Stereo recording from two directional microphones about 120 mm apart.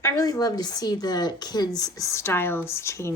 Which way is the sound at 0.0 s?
30° left (ahead or behind).